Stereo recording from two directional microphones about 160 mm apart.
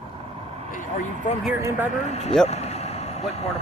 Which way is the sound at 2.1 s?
45° left (ahead or behind).